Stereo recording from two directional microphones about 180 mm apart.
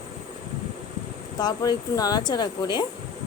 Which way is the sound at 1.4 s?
20° left (ahead or behind).